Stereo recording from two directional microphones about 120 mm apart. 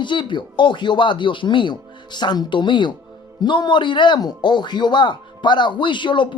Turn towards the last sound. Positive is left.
turn(degrees=40)  # may be behind; listen again after turning